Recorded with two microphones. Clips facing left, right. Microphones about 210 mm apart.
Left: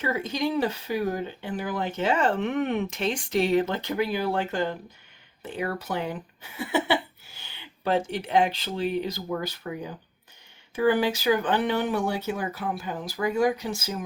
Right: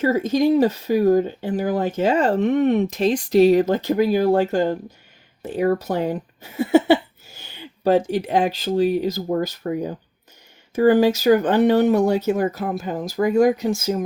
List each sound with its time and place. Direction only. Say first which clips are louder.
0.0 s speech: right 9 dB; 40° right (ahead or behind)